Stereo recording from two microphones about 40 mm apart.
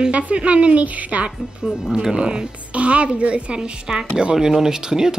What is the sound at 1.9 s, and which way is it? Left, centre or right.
A woman's voice, centre.